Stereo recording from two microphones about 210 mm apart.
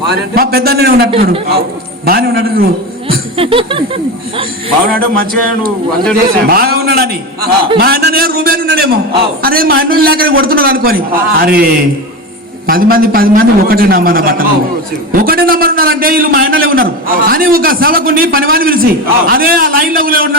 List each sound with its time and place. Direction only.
0.1 s a man's voice: 45° right (ahead or behind)
2.0 s a man's voice: 50° right (ahead or behind)
3.1 s chuckle: 25° right (ahead or behind)
4.9 s a man's voice: 45° right (ahead or behind)